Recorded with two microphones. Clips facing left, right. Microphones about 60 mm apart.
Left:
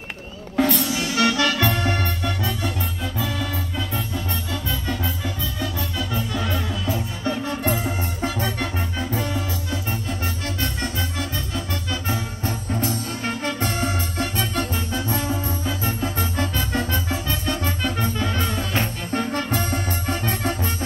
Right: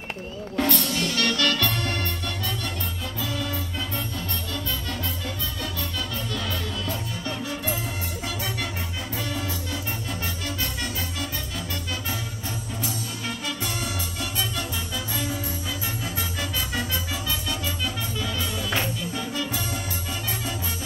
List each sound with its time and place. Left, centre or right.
0.6 s music: centre
7.4 s music: left
7.8 s music: left